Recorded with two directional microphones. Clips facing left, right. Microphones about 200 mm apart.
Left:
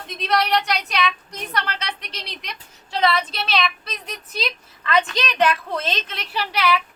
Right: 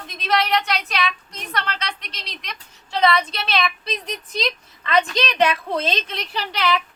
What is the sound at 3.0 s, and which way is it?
A woman's voice, 5° left (ahead or behind).